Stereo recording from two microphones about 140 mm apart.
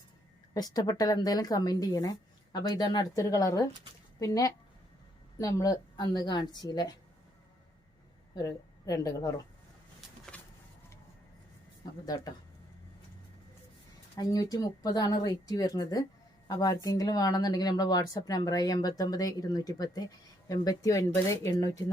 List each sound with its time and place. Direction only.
0.5 s speech: 30° left (ahead or behind)
8.4 s a woman's voice: 25° left (ahead or behind)
10.3 s a sound: 10° left (ahead or behind)
12.0 s speech: 30° left (ahead or behind)
14.2 s speech: 25° left (ahead or behind)